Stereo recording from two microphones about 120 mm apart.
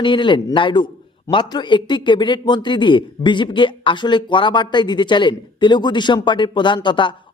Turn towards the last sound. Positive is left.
turn(degrees=40)  # may be behind; listen again after turning